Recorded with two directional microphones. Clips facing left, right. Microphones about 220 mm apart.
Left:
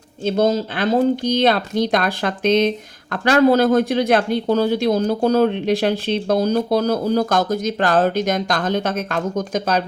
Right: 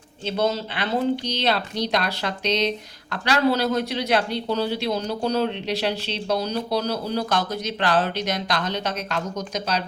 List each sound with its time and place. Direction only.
0.3 s speech: 45° left (ahead or behind)